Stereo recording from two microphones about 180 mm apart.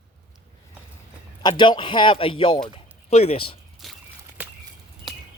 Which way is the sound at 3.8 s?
Centre (ahead or behind).